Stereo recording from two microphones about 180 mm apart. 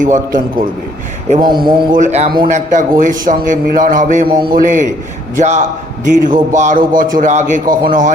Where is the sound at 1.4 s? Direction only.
25° right (ahead or behind).